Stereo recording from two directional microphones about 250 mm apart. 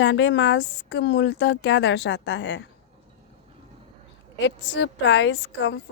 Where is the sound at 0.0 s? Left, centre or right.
Left.